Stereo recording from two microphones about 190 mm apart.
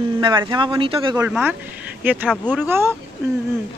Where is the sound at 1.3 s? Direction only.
10° right (ahead or behind).